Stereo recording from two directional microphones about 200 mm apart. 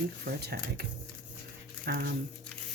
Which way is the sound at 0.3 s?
50° right (ahead or behind).